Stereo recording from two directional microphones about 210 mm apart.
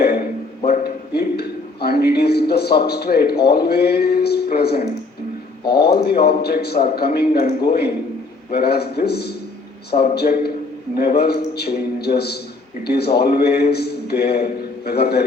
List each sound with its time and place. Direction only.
0.0 s music: 50° left (ahead or behind)
0.9 s a man's voice: 50° left (ahead or behind)